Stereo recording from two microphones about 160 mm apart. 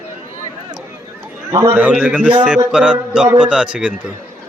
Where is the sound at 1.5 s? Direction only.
15° right (ahead or behind).